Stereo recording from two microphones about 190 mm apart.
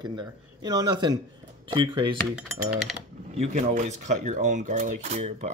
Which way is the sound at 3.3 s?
35° right (ahead or behind).